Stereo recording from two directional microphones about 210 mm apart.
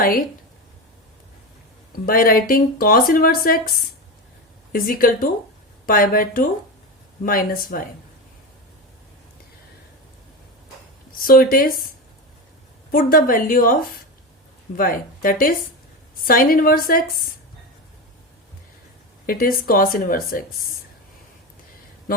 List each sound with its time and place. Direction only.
0.0 s speech: 40° left (ahead or behind)
2.0 s speech: 45° left (ahead or behind)
4.7 s speech: 40° left (ahead or behind)
11.3 s speech: 45° left (ahead or behind)
12.9 s speech: 45° left (ahead or behind)
14.8 s speech: 40° left (ahead or behind)
19.2 s speech: 45° left (ahead or behind)